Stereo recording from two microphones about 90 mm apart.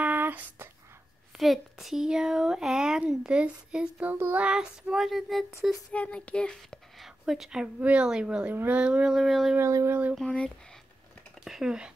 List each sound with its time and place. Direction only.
0.0 s a sound: 20° right (ahead or behind)
1.4 s speech: centre (ahead or behind)
5.9 s speech: 15° left (ahead or behind)
7.2 s speech: 5° right (ahead or behind)
9.6 s speech: 30° right (ahead or behind)
10.1 s speech: 10° left (ahead or behind)
11.4 s speech: 5° right (ahead or behind)